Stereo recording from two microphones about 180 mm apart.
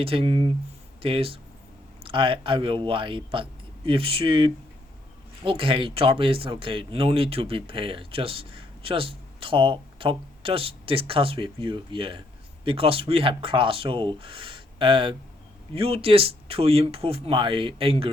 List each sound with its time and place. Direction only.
0.0 s speech: 30° right (ahead or behind)